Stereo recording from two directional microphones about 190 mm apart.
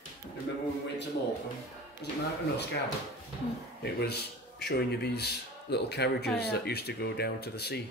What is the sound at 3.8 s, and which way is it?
Speech, 60° left (ahead or behind).